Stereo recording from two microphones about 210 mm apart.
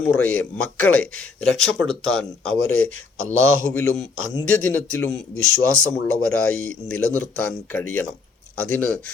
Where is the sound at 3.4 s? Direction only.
70° left (ahead or behind).